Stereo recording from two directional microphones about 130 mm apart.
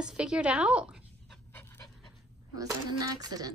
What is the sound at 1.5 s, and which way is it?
Pant, 15° left (ahead or behind).